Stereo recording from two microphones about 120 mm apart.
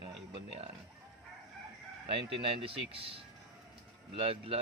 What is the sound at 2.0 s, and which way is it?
Speech, 50° right (ahead or behind).